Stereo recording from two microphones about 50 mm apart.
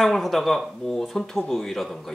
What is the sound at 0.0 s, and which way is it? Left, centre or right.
Speech, centre.